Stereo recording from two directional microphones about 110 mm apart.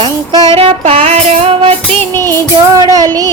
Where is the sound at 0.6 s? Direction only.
60° right (ahead or behind).